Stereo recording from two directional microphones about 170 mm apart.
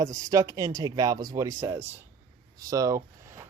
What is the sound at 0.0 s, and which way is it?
Speech, 20° right (ahead or behind).